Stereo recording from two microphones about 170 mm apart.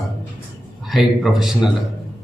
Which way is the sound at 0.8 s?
Centre (ahead or behind).